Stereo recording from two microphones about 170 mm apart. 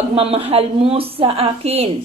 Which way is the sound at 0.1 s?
35° right (ahead or behind).